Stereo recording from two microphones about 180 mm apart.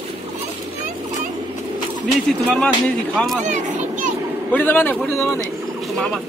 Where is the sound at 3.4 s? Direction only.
45° right (ahead or behind).